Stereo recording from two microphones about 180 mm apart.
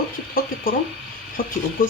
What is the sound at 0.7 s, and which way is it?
Speech, 55° left (ahead or behind).